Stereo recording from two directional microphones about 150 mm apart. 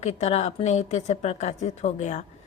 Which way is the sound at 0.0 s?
50° left (ahead or behind).